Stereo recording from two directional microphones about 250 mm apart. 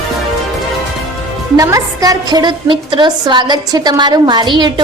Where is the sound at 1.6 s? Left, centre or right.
Centre.